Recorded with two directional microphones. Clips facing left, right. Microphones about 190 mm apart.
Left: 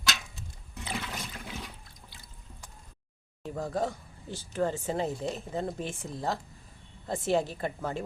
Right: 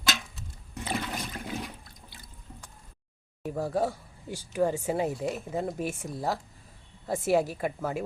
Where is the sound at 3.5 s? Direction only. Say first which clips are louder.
Right 3 dB; 10° right (ahead or behind).